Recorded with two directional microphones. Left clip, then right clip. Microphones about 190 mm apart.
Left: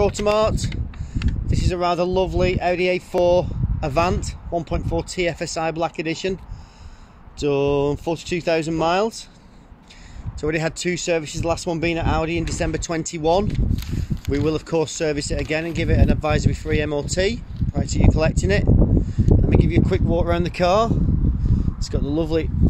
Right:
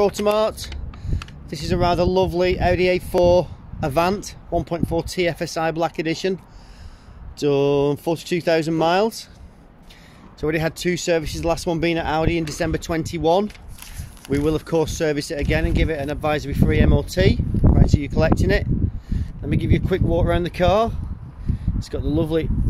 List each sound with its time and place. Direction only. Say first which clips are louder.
0.0 s speech: even; 10° right (ahead or behind)
7.3 s speech: right 1 dB; 15° right (ahead or behind)
10.4 s speech: right 1 dB; 5° right (ahead or behind)